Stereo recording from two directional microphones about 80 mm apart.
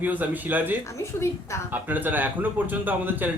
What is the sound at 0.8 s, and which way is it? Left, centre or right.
Speech, left.